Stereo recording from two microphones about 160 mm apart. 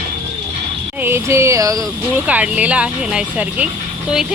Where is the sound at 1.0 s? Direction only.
15° right (ahead or behind).